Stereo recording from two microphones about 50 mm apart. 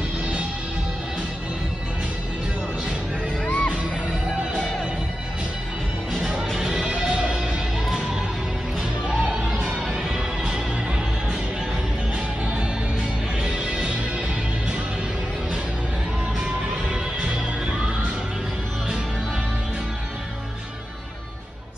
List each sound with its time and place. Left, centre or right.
3.4 s music: left
6.7 s music: centre
13.4 s music: centre
16.9 s music: right